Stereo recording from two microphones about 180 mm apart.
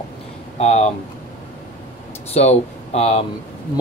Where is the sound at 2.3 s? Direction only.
35° left (ahead or behind).